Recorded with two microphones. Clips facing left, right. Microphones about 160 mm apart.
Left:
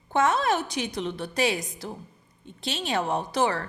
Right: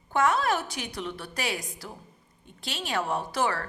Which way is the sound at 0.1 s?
25° left (ahead or behind).